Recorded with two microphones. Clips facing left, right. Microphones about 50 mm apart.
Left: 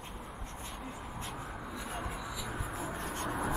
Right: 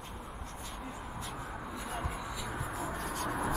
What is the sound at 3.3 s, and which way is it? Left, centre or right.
Writing, centre.